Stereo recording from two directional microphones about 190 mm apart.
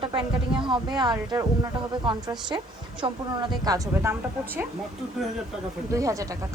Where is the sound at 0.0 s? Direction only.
25° right (ahead or behind).